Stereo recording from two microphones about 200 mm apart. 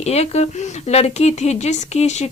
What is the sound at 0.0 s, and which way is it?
Speech, 30° left (ahead or behind).